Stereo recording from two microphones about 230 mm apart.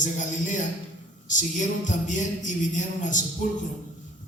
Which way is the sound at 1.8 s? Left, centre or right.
Left.